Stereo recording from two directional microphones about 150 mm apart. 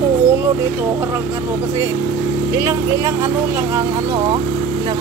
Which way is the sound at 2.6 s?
20° right (ahead or behind).